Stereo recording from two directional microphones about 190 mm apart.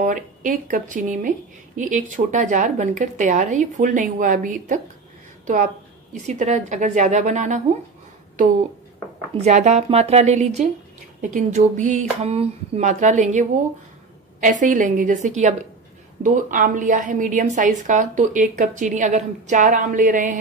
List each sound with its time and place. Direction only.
0.0 s a woman's voice: 45° right (ahead or behind)
6.2 s speech: 40° right (ahead or behind)
9.4 s a woman's voice: 35° right (ahead or behind)